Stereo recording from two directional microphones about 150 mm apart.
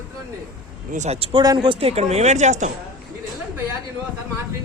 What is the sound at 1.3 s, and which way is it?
Speech, 25° right (ahead or behind).